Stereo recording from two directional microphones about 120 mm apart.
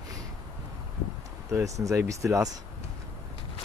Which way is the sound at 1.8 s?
25° right (ahead or behind).